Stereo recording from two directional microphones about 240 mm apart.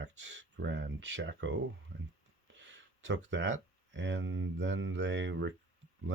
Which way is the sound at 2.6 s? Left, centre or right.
Right.